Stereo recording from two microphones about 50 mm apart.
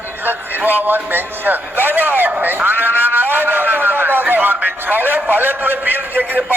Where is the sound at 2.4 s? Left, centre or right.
Right.